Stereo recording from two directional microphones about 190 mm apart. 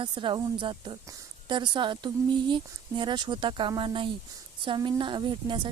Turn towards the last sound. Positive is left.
turn(degrees=-25)  # may be behind; listen again after turning